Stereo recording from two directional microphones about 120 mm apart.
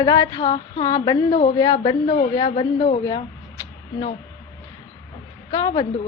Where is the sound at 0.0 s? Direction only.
35° left (ahead or behind).